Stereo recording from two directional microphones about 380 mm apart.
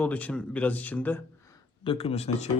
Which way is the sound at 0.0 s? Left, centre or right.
Centre.